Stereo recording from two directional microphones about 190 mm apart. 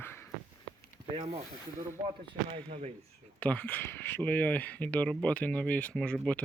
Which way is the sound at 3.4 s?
5° left (ahead or behind).